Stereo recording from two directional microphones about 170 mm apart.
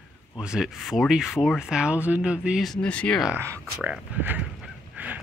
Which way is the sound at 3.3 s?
15° right (ahead or behind).